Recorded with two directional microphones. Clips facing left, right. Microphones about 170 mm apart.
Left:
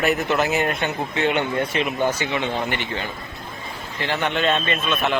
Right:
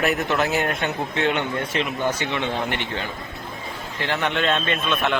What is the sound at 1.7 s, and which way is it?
Speech, 15° left (ahead or behind).